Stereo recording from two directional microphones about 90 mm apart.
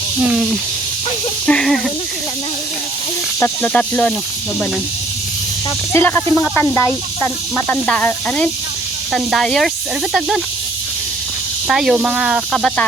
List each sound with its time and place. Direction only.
0.2 s speech: 5° right (ahead or behind)
3.4 s speech: 15° left (ahead or behind)
5.9 s speech: 25° left (ahead or behind)
9.1 s speech: centre (ahead or behind)
11.7 s speech: 5° right (ahead or behind)
12.5 s speech: 5° left (ahead or behind)